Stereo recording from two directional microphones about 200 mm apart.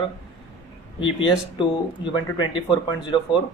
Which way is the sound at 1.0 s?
25° left (ahead or behind).